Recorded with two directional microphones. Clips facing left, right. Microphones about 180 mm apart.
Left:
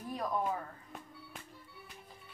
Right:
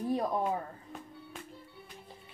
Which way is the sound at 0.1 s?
30° right (ahead or behind).